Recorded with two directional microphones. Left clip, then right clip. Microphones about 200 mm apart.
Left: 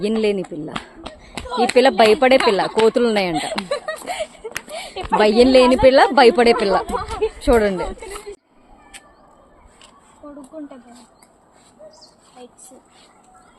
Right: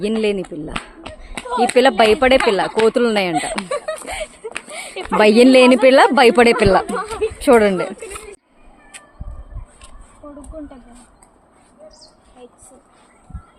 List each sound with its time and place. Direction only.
0.0 s speech: 5° right (ahead or behind)
3.9 s a sound: 5° left (ahead or behind)
5.1 s speech: 35° right (ahead or behind)
6.8 s speech: centre (ahead or behind)
7.3 s speech: 25° right (ahead or behind)
7.9 s a sound: centre (ahead or behind)